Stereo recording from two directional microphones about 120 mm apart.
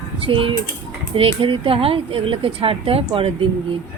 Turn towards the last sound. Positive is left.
turn(degrees=-50)  # may be behind; listen again after turning